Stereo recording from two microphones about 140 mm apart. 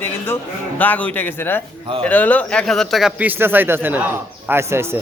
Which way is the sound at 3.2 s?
15° right (ahead or behind).